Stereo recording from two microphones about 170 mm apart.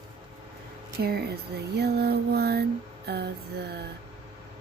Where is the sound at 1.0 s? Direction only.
70° right (ahead or behind).